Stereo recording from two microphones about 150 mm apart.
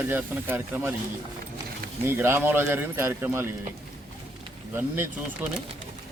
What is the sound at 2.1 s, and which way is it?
A man's voice, 15° right (ahead or behind).